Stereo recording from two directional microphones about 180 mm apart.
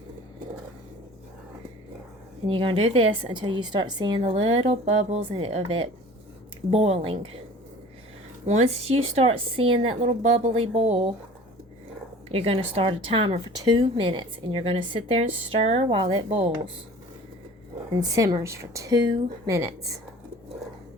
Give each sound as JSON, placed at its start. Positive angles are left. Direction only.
{"t": 2.5, "sound": "a woman's voice", "side_deg": -30}
{"t": 8.4, "sound": "a woman's voice", "side_deg": -35}
{"t": 12.3, "sound": "speech", "side_deg": -30}
{"t": 17.9, "sound": "speech", "side_deg": -20}